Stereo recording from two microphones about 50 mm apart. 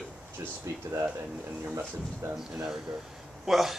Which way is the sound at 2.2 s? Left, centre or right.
Right.